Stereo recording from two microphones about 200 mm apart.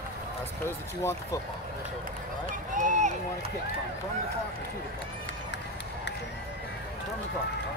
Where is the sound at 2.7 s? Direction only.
40° right (ahead or behind).